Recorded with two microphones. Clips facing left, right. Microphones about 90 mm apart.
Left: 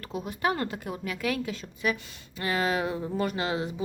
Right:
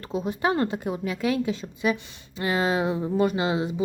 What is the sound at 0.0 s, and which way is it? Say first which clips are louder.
Speech: right 4 dB; 25° right (ahead or behind).